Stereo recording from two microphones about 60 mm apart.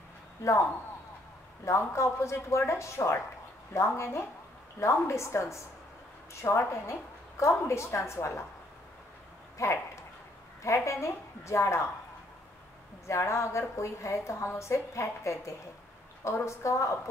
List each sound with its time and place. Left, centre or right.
0.4 s speech: left
1.6 s a woman's voice: left
9.6 s a woman's voice: left
13.0 s a woman's voice: left